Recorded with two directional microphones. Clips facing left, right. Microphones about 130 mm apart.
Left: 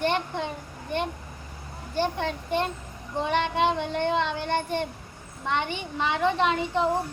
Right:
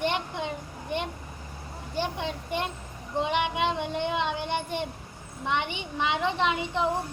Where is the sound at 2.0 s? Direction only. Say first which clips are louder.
Left 4 dB; 15° right (ahead or behind).